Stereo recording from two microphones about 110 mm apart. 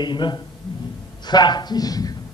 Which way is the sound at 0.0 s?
45° left (ahead or behind).